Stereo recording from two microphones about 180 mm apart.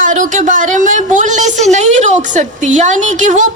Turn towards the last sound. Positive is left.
turn(degrees=-45)  # may be behind; listen again after turning